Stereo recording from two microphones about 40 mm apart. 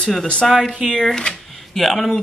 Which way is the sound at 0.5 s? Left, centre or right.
Centre.